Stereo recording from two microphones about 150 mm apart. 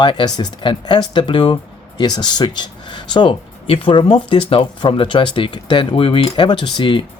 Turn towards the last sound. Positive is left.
turn(degrees=30)  # may be behind; listen again after turning